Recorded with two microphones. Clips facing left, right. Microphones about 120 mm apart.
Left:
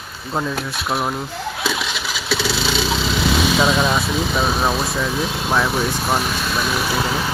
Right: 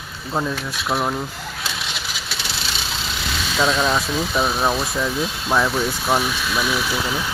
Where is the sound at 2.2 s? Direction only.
90° left.